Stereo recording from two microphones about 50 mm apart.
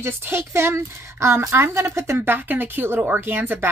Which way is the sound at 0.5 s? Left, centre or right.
Right.